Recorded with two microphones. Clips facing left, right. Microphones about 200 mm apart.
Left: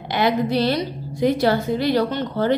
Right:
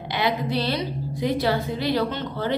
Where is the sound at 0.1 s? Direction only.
45° left (ahead or behind).